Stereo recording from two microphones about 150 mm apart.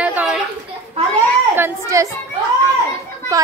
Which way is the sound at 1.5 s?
20° right (ahead or behind).